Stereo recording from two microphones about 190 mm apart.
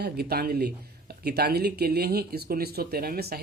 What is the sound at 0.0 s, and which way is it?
Speech, 55° right (ahead or behind).